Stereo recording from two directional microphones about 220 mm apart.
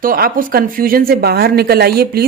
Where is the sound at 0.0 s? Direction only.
40° right (ahead or behind).